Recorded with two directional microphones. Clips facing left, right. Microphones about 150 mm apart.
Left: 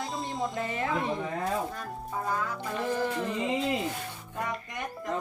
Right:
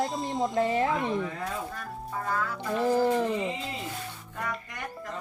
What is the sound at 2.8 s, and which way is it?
Speech, 35° right (ahead or behind).